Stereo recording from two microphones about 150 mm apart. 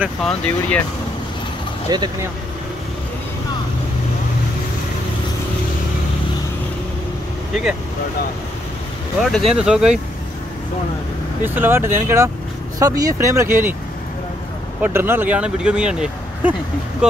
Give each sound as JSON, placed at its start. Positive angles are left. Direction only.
{"t": 0.2, "sound": "speech", "side_deg": 5}
{"t": 1.9, "sound": "speech", "side_deg": -25}
{"t": 9.2, "sound": "speech", "side_deg": 0}
{"t": 11.4, "sound": "speech", "side_deg": -15}
{"t": 14.8, "sound": "speech", "side_deg": -15}